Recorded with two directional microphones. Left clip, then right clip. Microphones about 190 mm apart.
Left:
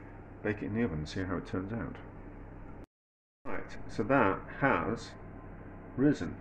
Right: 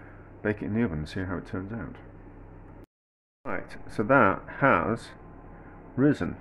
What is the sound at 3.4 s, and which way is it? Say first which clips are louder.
Speech: right 6 dB; 35° right (ahead or behind).